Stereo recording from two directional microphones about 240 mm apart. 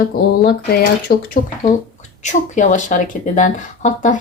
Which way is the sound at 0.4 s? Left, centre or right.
Left.